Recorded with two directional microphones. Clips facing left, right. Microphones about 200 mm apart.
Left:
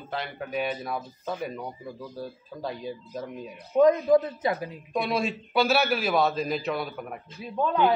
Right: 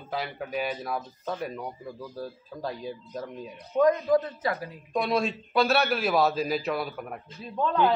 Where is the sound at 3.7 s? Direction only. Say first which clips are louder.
Left 3 dB; 20° left (ahead or behind).